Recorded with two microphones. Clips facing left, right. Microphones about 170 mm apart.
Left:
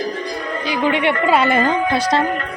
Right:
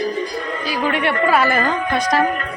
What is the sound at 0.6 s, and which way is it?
Speech, 20° left (ahead or behind).